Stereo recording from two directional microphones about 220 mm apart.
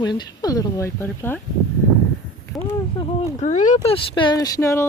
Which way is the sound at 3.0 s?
30° left (ahead or behind).